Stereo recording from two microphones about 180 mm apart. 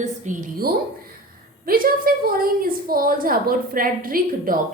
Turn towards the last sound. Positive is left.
turn(degrees=-50)  # may be behind; listen again after turning